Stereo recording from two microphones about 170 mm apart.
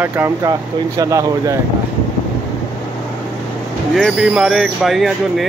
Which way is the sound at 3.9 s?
Centre (ahead or behind).